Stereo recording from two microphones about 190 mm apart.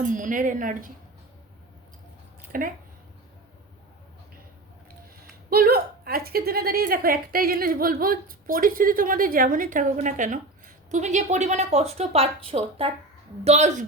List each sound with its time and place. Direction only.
0.0 s a woman's voice: 45° right (ahead or behind)
2.5 s speech: 45° right (ahead or behind)
5.5 s a woman's voice: 50° right (ahead or behind)